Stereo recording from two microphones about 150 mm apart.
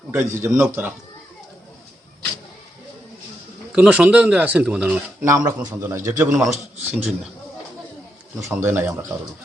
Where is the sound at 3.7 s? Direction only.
10° right (ahead or behind).